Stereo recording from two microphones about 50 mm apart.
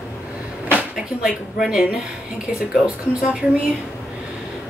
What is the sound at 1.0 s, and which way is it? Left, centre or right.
Speech, centre.